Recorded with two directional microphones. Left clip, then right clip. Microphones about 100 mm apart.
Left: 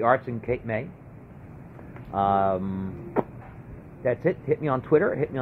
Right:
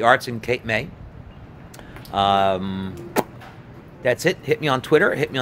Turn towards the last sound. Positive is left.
turn(degrees=-60)  # may be behind; listen again after turning